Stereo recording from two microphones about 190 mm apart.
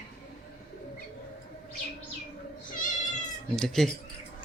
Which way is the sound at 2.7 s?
45° left (ahead or behind).